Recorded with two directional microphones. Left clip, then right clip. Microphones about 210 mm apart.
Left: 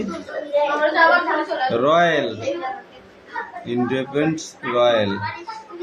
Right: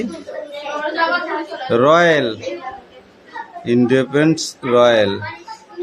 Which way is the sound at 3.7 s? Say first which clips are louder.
Right 8 dB; 45° right (ahead or behind).